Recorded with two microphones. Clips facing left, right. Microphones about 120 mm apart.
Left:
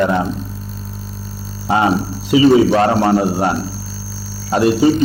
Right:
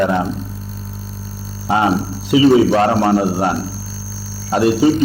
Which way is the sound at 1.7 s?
20° left (ahead or behind).